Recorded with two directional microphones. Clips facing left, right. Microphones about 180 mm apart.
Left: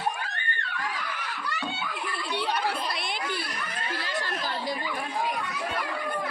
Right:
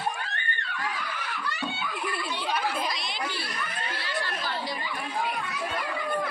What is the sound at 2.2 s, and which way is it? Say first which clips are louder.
Chatter: left 2 dB; 65° left (ahead or behind).